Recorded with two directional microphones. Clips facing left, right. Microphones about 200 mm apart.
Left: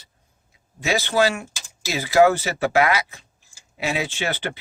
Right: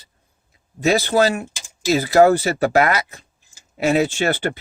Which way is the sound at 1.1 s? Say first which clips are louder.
Right 3 dB; 40° right (ahead or behind).